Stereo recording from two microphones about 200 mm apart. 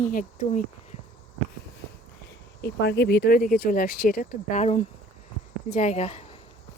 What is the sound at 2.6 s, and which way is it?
Speech, 60° left (ahead or behind).